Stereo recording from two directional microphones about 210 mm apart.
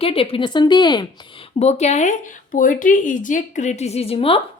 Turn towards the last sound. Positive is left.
turn(degrees=25)  # may be behind; listen again after turning